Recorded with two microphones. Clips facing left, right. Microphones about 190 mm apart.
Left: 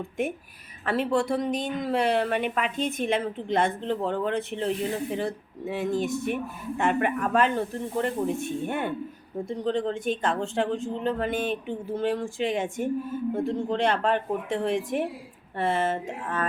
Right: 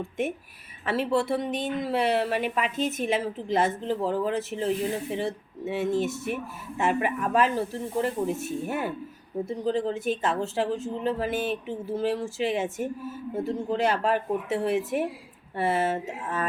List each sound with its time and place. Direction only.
0.2 s speech: centre (ahead or behind)